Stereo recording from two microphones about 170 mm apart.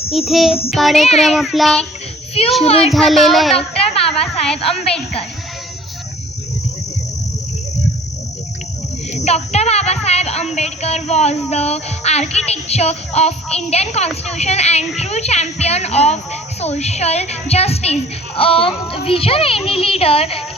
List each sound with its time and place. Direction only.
0.1 s speech: centre (ahead or behind)
2.6 s a child's voice: 35° left (ahead or behind)
2.9 s speech: centre (ahead or behind)
3.8 s a sound: 35° left (ahead or behind)
4.2 s speech: 5° left (ahead or behind)
9.1 s a child's voice: 40° left (ahead or behind)